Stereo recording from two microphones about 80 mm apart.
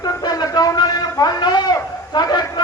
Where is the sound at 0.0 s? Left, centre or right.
Left.